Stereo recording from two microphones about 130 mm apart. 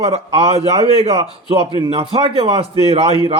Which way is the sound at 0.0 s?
50° right (ahead or behind).